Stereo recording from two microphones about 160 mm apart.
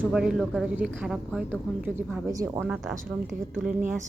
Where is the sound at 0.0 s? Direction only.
5° right (ahead or behind).